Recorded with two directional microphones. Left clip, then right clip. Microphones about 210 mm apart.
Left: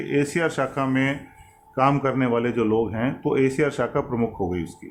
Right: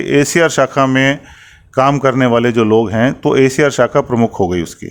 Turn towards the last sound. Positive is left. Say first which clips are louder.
# right 11 dB
turn(degrees=-55)  # may be behind; listen again after turning